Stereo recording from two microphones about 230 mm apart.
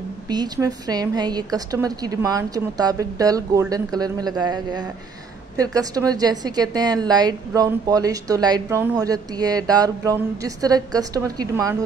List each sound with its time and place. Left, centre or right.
0.3 s a woman's voice: centre